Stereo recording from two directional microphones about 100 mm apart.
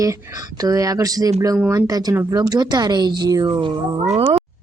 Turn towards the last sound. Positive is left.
turn(degrees=-90)